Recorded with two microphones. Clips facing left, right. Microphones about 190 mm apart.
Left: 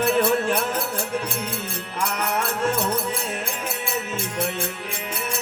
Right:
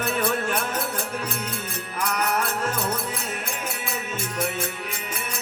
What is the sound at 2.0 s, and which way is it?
Music, 30° left (ahead or behind).